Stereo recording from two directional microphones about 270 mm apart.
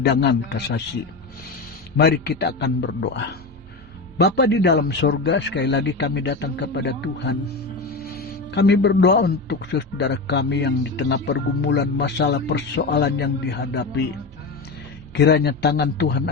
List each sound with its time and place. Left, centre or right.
0.0 s speech: left
2.0 s speech: left
4.2 s speech: left
15.1 s speech: left